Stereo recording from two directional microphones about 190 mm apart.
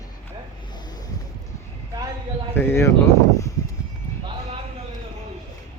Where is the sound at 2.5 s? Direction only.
10° left (ahead or behind).